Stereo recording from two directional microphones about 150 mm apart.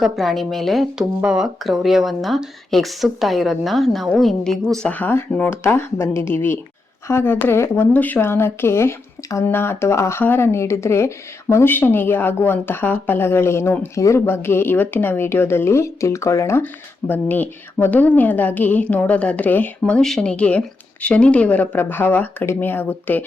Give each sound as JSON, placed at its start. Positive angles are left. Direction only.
{"t": 0.0, "sound": "speech", "side_deg": 0}